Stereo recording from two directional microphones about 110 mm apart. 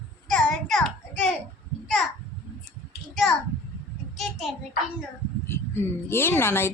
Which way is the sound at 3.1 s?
Centre (ahead or behind).